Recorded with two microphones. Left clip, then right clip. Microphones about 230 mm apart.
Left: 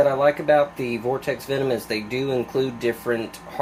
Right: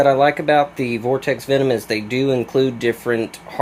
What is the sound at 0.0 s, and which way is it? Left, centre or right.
Speech, right.